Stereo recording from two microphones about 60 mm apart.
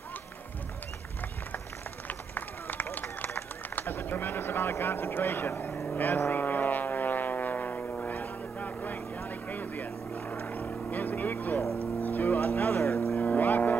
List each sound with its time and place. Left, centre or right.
2.0 s run: left
5.9 s vehicle: left
12.0 s music: left
13.2 s vehicle: left